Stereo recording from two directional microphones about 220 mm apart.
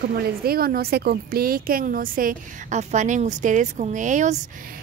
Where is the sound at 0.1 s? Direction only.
45° right (ahead or behind).